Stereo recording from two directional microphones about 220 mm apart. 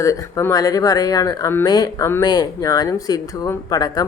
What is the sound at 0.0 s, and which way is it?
Speech, 15° left (ahead or behind).